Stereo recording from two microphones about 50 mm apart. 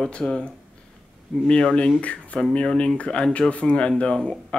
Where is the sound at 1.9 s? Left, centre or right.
Left.